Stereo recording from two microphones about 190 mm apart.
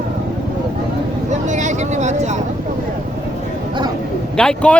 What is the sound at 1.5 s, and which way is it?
Vehicle, 40° right (ahead or behind).